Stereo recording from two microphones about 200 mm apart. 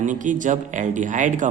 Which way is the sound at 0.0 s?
40° right (ahead or behind).